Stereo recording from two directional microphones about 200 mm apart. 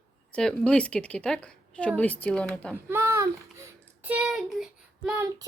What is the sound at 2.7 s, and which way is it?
Speech, 10° right (ahead or behind).